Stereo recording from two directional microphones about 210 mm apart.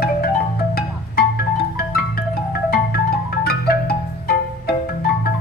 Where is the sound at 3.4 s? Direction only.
45° left (ahead or behind).